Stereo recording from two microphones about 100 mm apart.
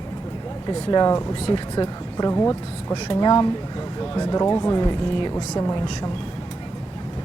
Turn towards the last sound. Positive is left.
turn(degrees=45)  # may be behind; listen again after turning